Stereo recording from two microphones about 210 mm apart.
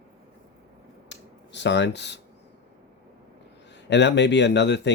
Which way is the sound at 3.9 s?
55° left (ahead or behind).